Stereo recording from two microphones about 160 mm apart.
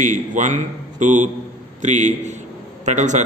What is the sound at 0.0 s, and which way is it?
A man's voice, 50° right (ahead or behind).